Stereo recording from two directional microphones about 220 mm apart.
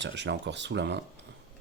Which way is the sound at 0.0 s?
55° right (ahead or behind).